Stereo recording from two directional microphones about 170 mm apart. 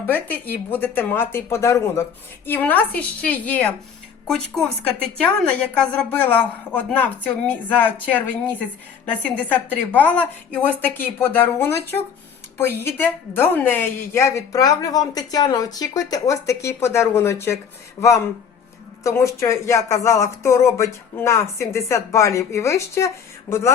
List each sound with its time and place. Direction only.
0.0 s a woman's voice: 10° left (ahead or behind)
9.0 s a woman's voice: 10° left (ahead or behind)